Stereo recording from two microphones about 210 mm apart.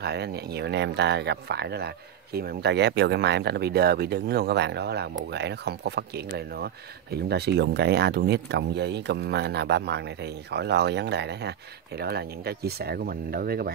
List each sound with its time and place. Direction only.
0.0 s speech: 50° right (ahead or behind)